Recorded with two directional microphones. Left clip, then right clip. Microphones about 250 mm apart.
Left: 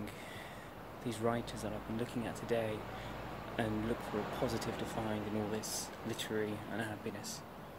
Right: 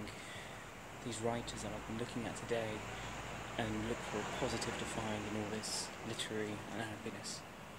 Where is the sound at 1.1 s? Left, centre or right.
Centre.